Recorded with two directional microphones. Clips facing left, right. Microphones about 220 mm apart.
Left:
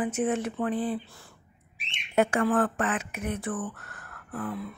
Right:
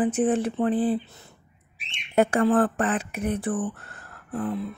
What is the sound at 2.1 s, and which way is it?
Speech, 35° right (ahead or behind).